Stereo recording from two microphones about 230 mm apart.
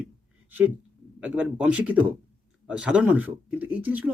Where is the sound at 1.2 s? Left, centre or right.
Centre.